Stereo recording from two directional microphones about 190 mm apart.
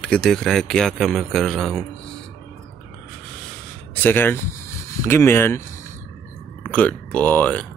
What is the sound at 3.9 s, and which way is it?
Speech, 10° left (ahead or behind).